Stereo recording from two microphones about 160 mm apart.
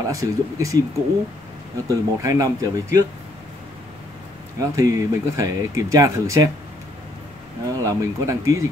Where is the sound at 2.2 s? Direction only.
20° right (ahead or behind).